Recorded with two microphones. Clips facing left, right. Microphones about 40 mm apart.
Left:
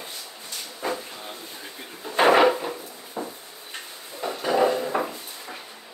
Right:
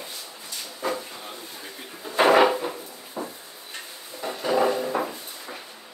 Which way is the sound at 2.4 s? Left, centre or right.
Centre.